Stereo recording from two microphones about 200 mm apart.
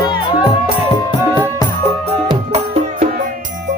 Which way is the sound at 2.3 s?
30° right (ahead or behind).